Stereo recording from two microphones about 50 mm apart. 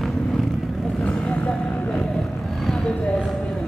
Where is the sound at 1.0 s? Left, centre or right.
Left.